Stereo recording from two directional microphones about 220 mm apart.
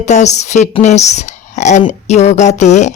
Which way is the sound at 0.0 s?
35° left (ahead or behind).